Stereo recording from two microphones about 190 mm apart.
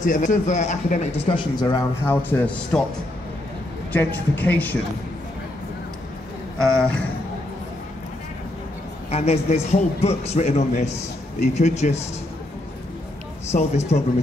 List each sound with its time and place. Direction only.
0.0 s a man's voice: 40° left (ahead or behind); by 2.8 s 5° left (ahead or behind)
3.9 s speech: 10° left (ahead or behind)
6.6 s a man's voice: 5° left (ahead or behind)
9.1 s a man's voice: 35° left (ahead or behind)
13.5 s a man's voice: 35° left (ahead or behind)